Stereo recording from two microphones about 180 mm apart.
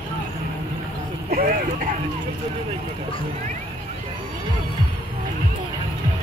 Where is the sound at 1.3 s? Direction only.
55° right (ahead or behind).